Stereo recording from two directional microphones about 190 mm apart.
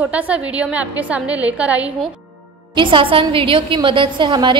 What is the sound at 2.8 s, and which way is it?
A woman's voice, 25° right (ahead or behind).